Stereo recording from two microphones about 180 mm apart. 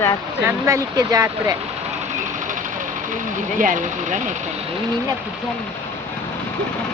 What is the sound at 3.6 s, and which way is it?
Speech, 45° right (ahead or behind).